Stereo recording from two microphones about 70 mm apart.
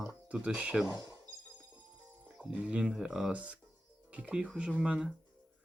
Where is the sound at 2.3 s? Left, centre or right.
Right.